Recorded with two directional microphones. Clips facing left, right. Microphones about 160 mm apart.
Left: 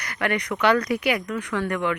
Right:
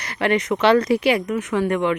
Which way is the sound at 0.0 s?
25° right (ahead or behind).